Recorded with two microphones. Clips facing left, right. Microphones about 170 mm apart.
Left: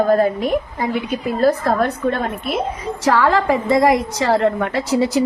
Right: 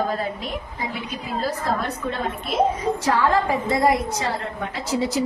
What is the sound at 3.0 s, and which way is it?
A woman's voice, 80° left.